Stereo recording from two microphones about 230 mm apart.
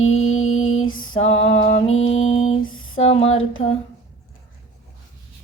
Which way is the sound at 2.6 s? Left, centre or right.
Left.